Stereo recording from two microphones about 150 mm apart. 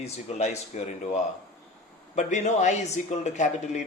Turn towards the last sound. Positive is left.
turn(degrees=50)  # may be behind; listen again after turning